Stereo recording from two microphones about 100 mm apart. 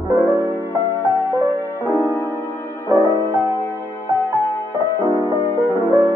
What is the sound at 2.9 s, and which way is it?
Music, 25° right (ahead or behind).